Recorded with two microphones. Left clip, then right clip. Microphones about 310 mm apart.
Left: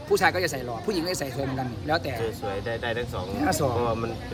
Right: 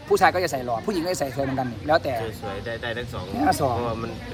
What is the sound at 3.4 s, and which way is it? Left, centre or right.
Speech, centre.